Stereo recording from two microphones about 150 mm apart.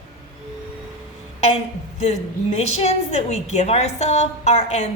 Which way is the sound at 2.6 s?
45° left (ahead or behind).